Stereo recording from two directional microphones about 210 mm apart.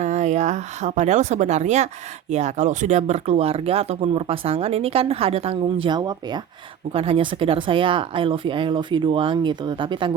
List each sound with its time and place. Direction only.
0.0 s speech: 35° right (ahead or behind)